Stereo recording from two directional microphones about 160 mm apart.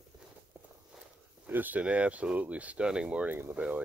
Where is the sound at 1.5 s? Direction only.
10° right (ahead or behind).